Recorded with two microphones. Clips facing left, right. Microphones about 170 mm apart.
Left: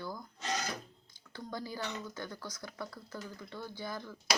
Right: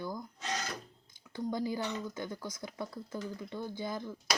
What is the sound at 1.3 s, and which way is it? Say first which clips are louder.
Speech: right 7 dB; 15° right (ahead or behind).